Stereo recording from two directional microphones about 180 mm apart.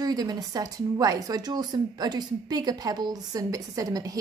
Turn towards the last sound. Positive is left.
turn(degrees=-20)  # may be behind; listen again after turning